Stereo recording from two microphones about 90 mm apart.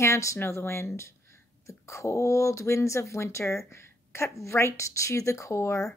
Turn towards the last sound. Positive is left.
turn(degrees=30)  # may be behind; listen again after turning